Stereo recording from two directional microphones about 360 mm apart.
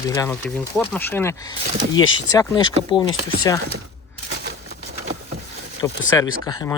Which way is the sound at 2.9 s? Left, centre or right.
Centre.